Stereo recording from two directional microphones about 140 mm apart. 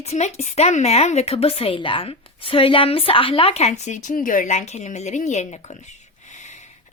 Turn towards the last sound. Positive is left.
turn(degrees=60)  # may be behind; listen again after turning